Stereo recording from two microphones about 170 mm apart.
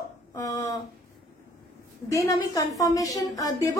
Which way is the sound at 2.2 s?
20° left (ahead or behind).